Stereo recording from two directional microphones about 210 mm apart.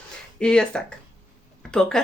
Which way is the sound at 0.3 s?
5° left (ahead or behind).